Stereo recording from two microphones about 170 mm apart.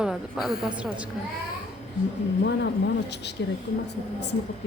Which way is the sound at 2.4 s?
85° left.